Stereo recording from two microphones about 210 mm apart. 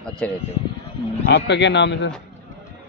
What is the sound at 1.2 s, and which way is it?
Speech, 55° left (ahead or behind).